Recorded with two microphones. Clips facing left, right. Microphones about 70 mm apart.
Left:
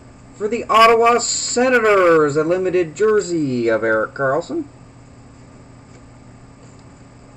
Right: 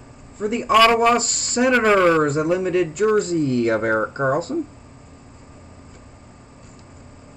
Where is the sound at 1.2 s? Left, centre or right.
Left.